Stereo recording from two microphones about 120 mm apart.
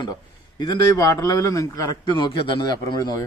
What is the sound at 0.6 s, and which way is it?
Speech, 35° left (ahead or behind).